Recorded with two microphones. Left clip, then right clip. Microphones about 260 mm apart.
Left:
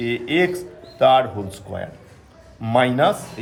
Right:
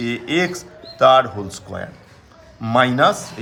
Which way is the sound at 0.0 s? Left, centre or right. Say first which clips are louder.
Left 1 dB; centre.